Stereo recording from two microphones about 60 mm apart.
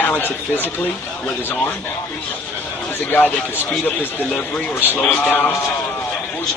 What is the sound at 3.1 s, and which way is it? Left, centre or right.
Speech, left.